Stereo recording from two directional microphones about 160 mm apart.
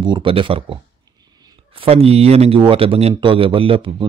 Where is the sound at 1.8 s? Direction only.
40° right (ahead or behind).